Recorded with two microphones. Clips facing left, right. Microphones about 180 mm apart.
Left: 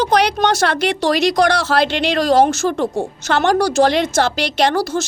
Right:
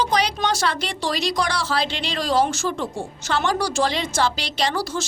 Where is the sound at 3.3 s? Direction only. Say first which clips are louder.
Left 7 dB; 75° left (ahead or behind).